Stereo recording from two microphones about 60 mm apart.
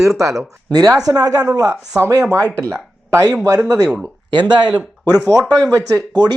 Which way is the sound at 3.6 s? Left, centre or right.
Right.